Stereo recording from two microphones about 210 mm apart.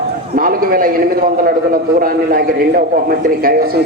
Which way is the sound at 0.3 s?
45° right (ahead or behind).